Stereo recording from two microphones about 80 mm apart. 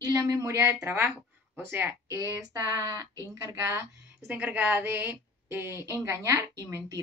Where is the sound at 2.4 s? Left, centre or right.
Right.